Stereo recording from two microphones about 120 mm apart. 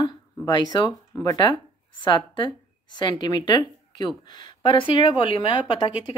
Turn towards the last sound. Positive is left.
turn(degrees=50)  # may be behind; listen again after turning